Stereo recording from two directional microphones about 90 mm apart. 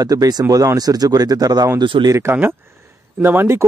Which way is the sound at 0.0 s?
45° right (ahead or behind).